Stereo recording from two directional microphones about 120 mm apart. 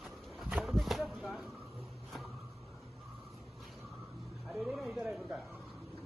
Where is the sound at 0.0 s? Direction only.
Centre (ahead or behind).